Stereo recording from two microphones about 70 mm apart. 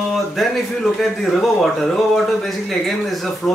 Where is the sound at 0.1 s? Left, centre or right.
Centre.